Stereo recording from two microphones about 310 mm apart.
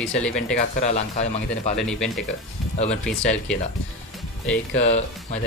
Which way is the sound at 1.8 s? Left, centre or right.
Centre.